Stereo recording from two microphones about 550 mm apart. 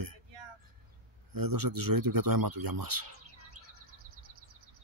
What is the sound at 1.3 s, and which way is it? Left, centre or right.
Speech, right.